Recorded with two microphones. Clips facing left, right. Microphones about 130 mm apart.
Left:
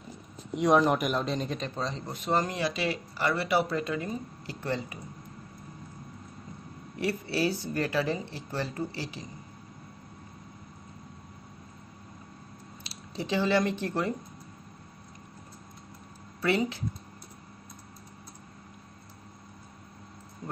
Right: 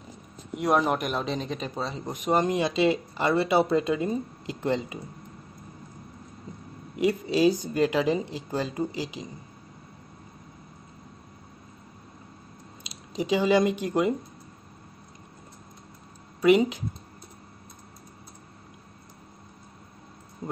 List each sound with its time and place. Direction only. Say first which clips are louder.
0.6 s a man's voice: left 1 dB; 5° right (ahead or behind)
2.0 s speech: right 5 dB; 15° right (ahead or behind)
7.0 s speech: right 6 dB; 15° right (ahead or behind)
12.8 s speech: right 6 dB; 15° right (ahead or behind)
16.3 s speech: right 8 dB; 15° right (ahead or behind)